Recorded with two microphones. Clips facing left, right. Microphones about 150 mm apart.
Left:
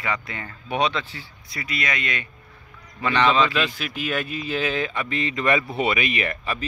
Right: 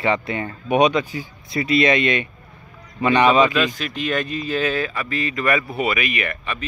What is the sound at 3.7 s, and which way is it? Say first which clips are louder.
Speech: right 3 dB; 10° left (ahead or behind).